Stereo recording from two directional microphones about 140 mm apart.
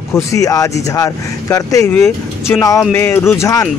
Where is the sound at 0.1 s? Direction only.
25° left (ahead or behind).